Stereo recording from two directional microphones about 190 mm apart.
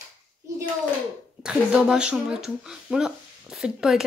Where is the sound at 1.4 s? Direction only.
5° right (ahead or behind).